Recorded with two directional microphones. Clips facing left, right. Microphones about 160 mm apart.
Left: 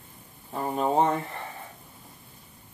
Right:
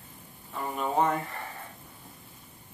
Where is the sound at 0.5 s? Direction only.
35° left (ahead or behind).